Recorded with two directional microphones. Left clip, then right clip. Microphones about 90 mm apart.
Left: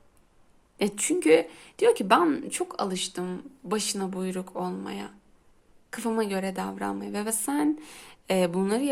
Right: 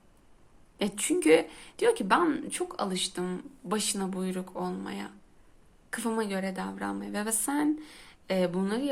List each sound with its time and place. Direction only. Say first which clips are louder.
0.8 s speech: left 4 dB; 30° left (ahead or behind)
1.1 s speech: left 2 dB; 15° left (ahead or behind)
2.0 s speech: left 4 dB; 40° left (ahead or behind); by 6.2 s 20° left (ahead or behind)
6.2 s speech: left 3 dB; 35° left (ahead or behind); by 7.7 s 20° left (ahead or behind)
7.8 s speech: left 2 dB; 50° left (ahead or behind)